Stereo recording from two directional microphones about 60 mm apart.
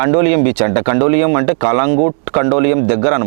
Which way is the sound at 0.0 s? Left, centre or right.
Right.